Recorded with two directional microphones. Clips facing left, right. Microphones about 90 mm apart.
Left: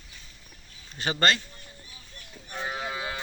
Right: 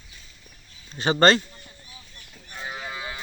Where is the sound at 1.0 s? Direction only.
30° right (ahead or behind).